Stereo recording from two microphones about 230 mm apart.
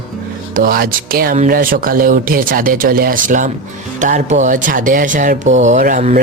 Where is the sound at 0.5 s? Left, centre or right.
Right.